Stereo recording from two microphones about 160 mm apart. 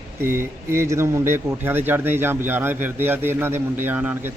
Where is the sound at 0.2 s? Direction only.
15° right (ahead or behind).